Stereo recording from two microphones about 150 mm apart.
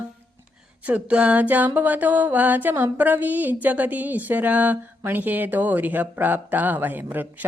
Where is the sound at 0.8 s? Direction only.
10° right (ahead or behind).